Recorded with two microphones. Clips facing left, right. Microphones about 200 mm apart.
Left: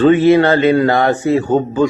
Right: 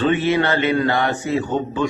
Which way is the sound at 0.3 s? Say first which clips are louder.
Left 7 dB; 40° left (ahead or behind).